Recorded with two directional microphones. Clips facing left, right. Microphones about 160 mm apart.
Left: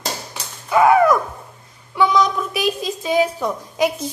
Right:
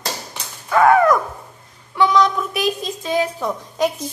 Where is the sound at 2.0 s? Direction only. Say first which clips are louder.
Right 1 dB; 5° left (ahead or behind).